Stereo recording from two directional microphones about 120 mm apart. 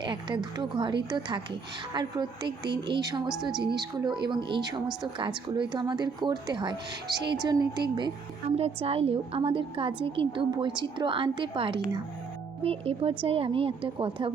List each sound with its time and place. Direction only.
0.0 s speech: 40° right (ahead or behind)
8.5 s a woman's voice: 55° right (ahead or behind)